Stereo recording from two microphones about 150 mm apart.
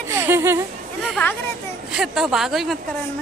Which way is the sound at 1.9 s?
Centre (ahead or behind).